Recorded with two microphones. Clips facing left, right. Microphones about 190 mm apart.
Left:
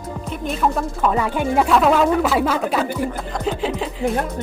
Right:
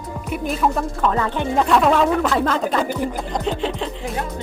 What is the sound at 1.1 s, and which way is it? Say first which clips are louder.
A woman's voice: left 3 dB; 10° left (ahead or behind).